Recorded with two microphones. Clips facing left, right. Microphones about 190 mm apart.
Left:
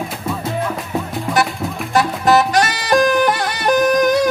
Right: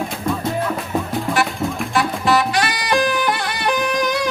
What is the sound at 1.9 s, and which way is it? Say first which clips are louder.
Music: left 4 dB; 40° left (ahead or behind).